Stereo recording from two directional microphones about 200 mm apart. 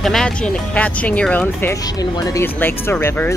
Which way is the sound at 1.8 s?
20° left (ahead or behind).